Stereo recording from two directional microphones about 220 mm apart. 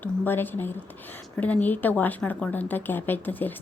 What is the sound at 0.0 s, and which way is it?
Speech, 10° left (ahead or behind).